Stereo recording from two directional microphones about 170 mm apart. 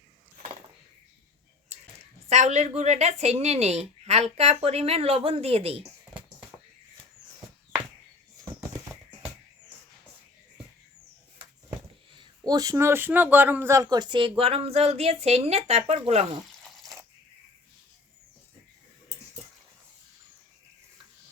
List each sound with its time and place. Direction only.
2.3 s speech: 40° right (ahead or behind)
12.4 s speech: 20° right (ahead or behind); by 16.2 s 40° right (ahead or behind)
16.6 s a sound: centre (ahead or behind)